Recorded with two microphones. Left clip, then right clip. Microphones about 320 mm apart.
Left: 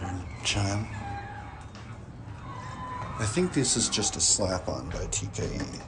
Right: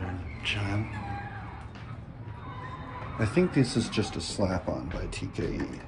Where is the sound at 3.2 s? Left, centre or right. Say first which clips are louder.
Right 2 dB; centre.